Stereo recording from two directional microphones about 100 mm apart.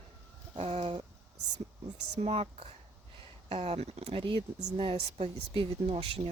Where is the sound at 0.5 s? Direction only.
80° right.